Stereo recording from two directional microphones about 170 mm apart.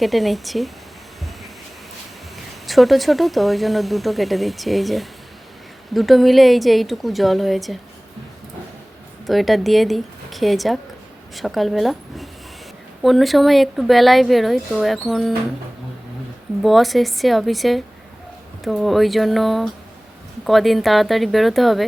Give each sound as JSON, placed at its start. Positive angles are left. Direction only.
{"t": 0.0, "sound": "speech", "side_deg": 0}
{"t": 2.6, "sound": "speech", "side_deg": 0}
{"t": 9.2, "sound": "speech", "side_deg": 0}
{"t": 16.6, "sound": "speech", "side_deg": 0}